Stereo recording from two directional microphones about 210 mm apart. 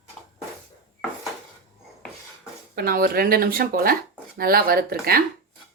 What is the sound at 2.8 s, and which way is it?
Speech, 45° right (ahead or behind).